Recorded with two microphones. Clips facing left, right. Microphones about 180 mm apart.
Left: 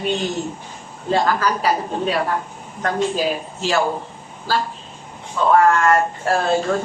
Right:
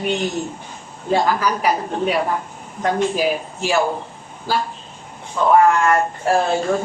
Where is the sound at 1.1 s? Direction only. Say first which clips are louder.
Right 1 dB; 15° right (ahead or behind).